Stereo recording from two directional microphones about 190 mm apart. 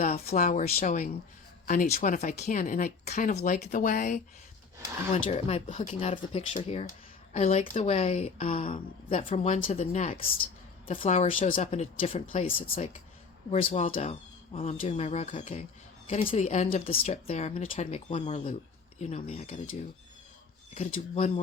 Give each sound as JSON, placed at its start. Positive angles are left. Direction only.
{"t": 0.3, "sound": "a woman's voice", "side_deg": 40}
{"t": 20.7, "sound": "speech", "side_deg": 35}